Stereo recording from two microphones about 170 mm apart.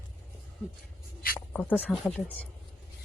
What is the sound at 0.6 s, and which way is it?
Speech, 10° left (ahead or behind).